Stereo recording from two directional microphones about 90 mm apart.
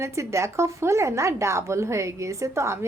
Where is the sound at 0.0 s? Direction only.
35° right (ahead or behind).